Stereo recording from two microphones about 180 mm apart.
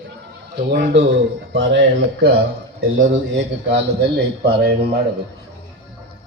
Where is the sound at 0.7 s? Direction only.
75° right (ahead or behind); by 5.0 s 60° right (ahead or behind).